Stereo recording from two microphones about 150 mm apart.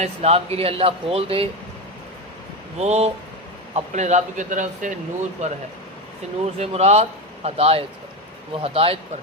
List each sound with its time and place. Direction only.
0.0 s speech: 45° right (ahead or behind)
2.7 s a man's voice: 45° right (ahead or behind)
6.6 s a man's voice: 45° right (ahead or behind)